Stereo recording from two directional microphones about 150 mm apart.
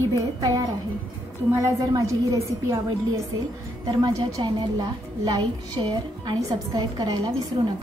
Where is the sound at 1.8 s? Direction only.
25° right (ahead or behind).